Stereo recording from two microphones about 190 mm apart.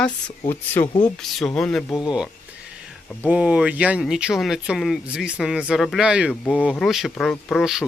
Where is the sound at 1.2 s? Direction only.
Centre (ahead or behind).